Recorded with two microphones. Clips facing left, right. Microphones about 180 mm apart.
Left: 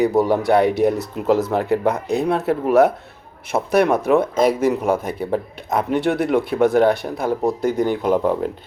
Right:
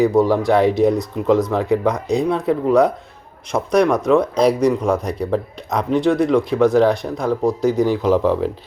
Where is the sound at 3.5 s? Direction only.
5° left (ahead or behind).